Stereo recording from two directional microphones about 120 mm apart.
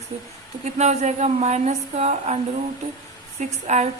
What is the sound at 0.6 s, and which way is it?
A woman's voice, 75° right (ahead or behind).